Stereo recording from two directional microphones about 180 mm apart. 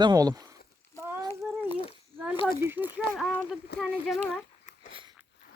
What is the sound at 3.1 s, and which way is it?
Speech, centre (ahead or behind).